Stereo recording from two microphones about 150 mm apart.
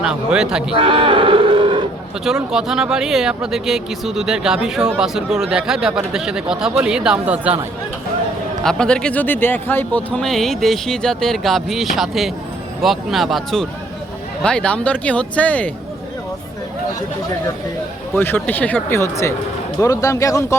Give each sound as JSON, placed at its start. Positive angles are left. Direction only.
{"t": 0.0, "sound": "speech", "side_deg": -5}
{"t": 0.8, "sound": "a sound", "side_deg": -35}
{"t": 2.2, "sound": "speech", "side_deg": -5}
{"t": 8.6, "sound": "speech", "side_deg": 5}
{"t": 18.1, "sound": "speech", "side_deg": 15}